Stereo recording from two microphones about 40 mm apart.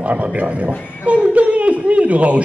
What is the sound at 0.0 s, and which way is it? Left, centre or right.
Speech, right.